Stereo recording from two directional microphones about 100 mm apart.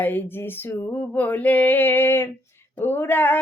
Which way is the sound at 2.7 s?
20° left (ahead or behind).